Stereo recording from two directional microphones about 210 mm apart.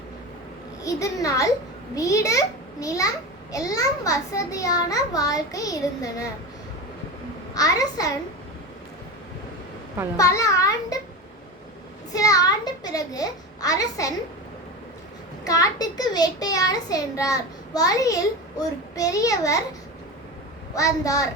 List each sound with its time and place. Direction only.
0.8 s a child's voice: 15° left (ahead or behind)
7.5 s a child's voice: 15° left (ahead or behind)
10.2 s a child's voice: 15° left (ahead or behind)
12.1 s a child's voice: 15° left (ahead or behind)
15.4 s a child's voice: 15° left (ahead or behind)
20.7 s a child's voice: 15° left (ahead or behind)